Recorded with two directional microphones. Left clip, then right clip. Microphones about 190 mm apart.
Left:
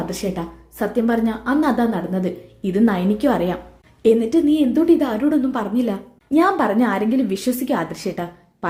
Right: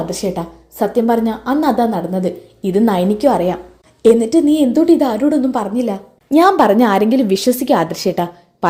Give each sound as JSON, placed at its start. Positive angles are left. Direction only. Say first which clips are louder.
{"t": 0.0, "sound": "a woman's voice", "louder": "right 5 dB", "side_deg": -15}
{"t": 5.7, "sound": "a woman's voice", "louder": "right 3 dB", "side_deg": -5}
{"t": 6.3, "sound": "a woman's voice", "louder": "right 7 dB", "side_deg": -30}